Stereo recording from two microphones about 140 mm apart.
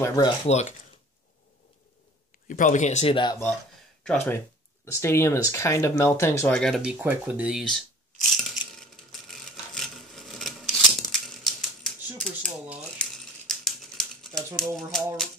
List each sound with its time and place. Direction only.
0.0 s speech: 25° left (ahead or behind)
0.5 s speech: 55° left (ahead or behind)
2.4 s speech: 70° left (ahead or behind); by 3.2 s 50° left (ahead or behind)
4.0 s speech: 10° left (ahead or behind)
6.5 s speech: 5° left (ahead or behind)
6.8 s mechanisms: 10° right (ahead or behind)
13.0 s a sound: 5° left (ahead or behind)